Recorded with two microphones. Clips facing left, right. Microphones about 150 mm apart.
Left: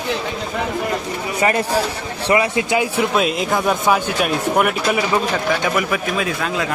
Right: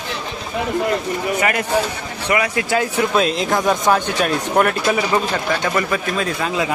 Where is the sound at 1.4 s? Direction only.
30° left (ahead or behind).